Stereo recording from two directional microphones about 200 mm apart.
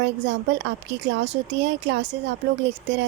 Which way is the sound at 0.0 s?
60° right (ahead or behind).